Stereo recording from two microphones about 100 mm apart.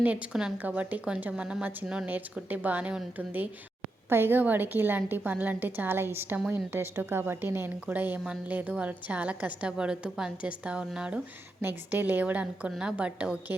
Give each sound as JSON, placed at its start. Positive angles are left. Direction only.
{"t": 0.0, "sound": "a woman's voice", "side_deg": -15}